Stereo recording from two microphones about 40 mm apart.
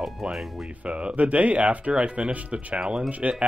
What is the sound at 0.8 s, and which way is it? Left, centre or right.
Speech, right.